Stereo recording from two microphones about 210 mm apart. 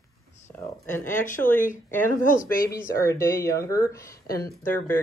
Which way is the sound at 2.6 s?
15° left (ahead or behind).